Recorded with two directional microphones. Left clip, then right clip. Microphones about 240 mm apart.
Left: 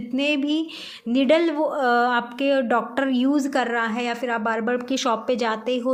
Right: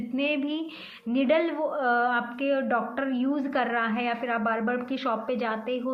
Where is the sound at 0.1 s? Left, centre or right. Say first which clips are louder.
Left 6 dB; left.